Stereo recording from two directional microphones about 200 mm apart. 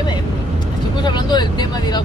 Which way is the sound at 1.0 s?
20° left (ahead or behind).